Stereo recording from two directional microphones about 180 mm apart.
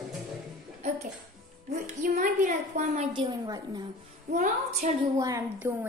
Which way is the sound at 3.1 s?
20° right (ahead or behind).